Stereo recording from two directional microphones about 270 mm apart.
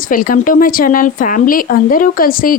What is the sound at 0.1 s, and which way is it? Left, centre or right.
A woman's voice, left.